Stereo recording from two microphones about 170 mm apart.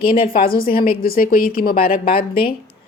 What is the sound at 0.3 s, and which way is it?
A woman's voice, 60° left (ahead or behind).